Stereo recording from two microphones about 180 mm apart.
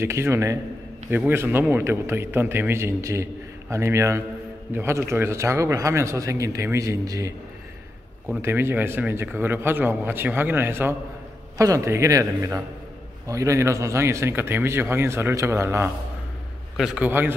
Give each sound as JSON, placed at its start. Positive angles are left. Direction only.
{"t": 0.0, "sound": "speech", "side_deg": -15}
{"t": 8.4, "sound": "speech", "side_deg": -15}